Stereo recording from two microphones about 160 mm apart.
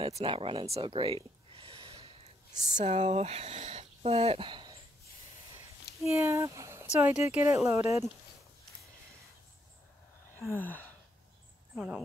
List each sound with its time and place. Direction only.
0.0 s a sound: 35° right (ahead or behind)
2.8 s speech: 45° right (ahead or behind); by 4.7 s 30° right (ahead or behind)
6.0 s speech: 15° right (ahead or behind)
10.5 s gasp: 10° left (ahead or behind)
11.7 s speech: 5° right (ahead or behind)